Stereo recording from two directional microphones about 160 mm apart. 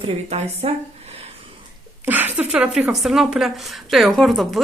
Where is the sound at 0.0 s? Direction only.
40° right (ahead or behind).